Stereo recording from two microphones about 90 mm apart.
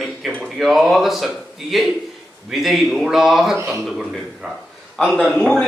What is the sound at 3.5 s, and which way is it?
Speech, 30° right (ahead or behind).